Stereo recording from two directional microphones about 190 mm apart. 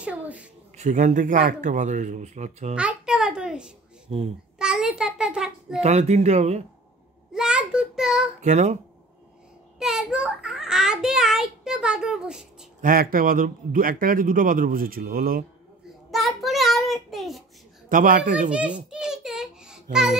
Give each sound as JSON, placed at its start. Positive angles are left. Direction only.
{"t": 0.0, "sound": "a sound", "side_deg": -5}
{"t": 0.7, "sound": "speech", "side_deg": -40}
{"t": 2.7, "sound": "a child's voice", "side_deg": -5}
{"t": 4.1, "sound": "speech", "side_deg": -30}
{"t": 4.6, "sound": "a child's voice", "side_deg": -5}
{"t": 5.8, "sound": "speech", "side_deg": -35}
{"t": 7.3, "sound": "a child's voice", "side_deg": -5}
{"t": 8.4, "sound": "speech", "side_deg": -40}
{"t": 9.8, "sound": "a child's voice", "side_deg": -5}
{"t": 12.8, "sound": "speech", "side_deg": -50}
{"t": 16.1, "sound": "child singing", "side_deg": 0}
{"t": 17.8, "sound": "speech", "side_deg": -45}
{"t": 18.5, "sound": "a sound", "side_deg": -5}